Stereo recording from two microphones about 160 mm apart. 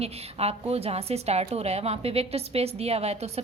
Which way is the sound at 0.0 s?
40° right (ahead or behind).